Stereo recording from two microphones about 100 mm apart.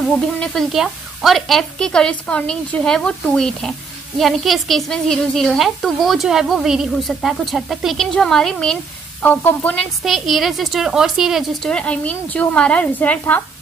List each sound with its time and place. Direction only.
0.4 s a woman's voice: centre (ahead or behind)
9.2 s a woman's voice: 15° left (ahead or behind)
10.0 s a woman's voice: centre (ahead or behind)
11.7 s a woman's voice: 10° left (ahead or behind)